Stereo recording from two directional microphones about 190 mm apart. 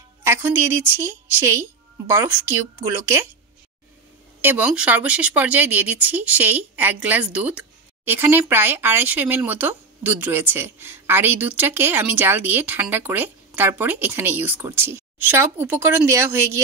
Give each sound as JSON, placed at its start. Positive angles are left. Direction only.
{"t": 0.2, "sound": "a woman's voice", "side_deg": -10}
{"t": 4.4, "sound": "speech", "side_deg": -10}